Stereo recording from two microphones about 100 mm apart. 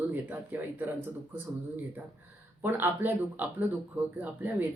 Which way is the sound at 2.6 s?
20° right (ahead or behind).